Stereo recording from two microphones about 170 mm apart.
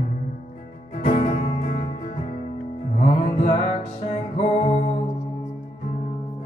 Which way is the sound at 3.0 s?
40° left (ahead or behind).